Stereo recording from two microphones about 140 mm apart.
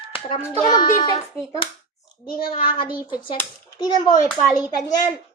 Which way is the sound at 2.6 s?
35° left (ahead or behind).